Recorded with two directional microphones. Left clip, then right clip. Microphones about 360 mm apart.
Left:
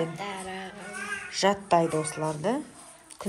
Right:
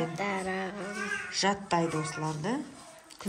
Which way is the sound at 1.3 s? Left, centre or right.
Centre.